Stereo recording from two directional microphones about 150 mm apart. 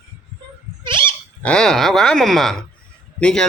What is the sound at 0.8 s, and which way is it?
Dog, 35° right (ahead or behind).